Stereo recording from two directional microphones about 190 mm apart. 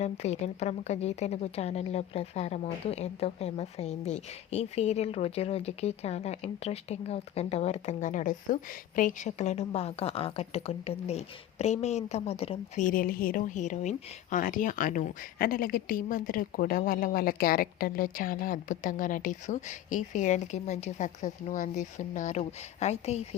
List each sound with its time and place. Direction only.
0.0 s a woman's voice: 35° left (ahead or behind)